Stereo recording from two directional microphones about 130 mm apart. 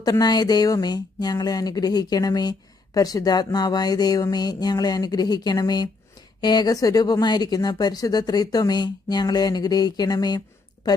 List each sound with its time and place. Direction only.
0.0 s speech: 30° left (ahead or behind)